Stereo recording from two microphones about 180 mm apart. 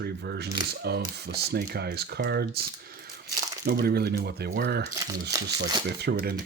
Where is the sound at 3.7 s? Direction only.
65° right (ahead or behind).